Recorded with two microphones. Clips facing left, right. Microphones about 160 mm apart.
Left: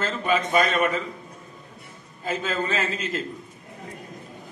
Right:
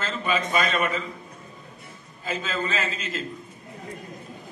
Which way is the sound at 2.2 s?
50° left (ahead or behind).